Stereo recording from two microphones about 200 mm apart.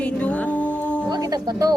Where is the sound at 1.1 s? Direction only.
20° right (ahead or behind).